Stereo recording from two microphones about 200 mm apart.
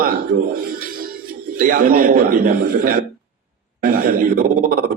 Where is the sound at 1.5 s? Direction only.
45° right (ahead or behind).